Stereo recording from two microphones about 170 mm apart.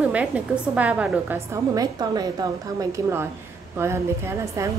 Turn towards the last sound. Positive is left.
turn(degrees=-15)  # may be behind; listen again after turning